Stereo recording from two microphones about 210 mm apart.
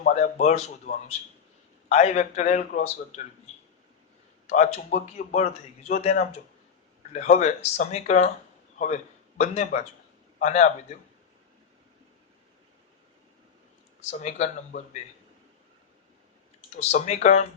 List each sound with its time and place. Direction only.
0.0 s a man's voice: 35° left (ahead or behind)
4.4 s a man's voice: 30° left (ahead or behind)
9.4 s a man's voice: 35° left (ahead or behind)
14.0 s a man's voice: 30° left (ahead or behind)
16.7 s a man's voice: 35° left (ahead or behind)